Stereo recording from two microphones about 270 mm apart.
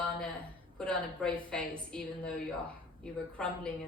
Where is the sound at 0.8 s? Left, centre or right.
Centre.